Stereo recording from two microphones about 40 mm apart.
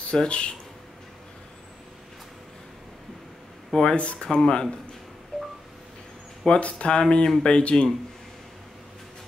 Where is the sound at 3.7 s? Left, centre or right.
Left.